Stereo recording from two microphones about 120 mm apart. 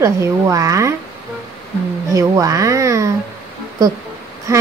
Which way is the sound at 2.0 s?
25° right (ahead or behind).